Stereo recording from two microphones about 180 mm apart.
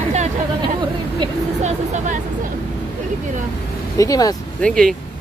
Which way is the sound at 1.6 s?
40° right (ahead or behind).